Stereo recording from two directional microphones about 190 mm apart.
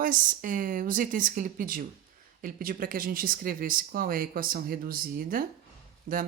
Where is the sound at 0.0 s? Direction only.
45° right (ahead or behind).